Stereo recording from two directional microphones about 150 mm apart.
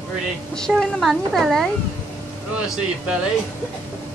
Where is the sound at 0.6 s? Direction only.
5° left (ahead or behind).